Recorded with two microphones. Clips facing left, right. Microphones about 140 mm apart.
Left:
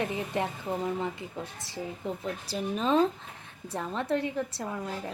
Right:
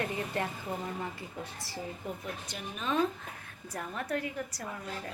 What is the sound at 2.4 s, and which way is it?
Speech, 35° left (ahead or behind).